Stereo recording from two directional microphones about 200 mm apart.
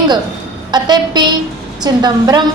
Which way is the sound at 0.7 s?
20° right (ahead or behind).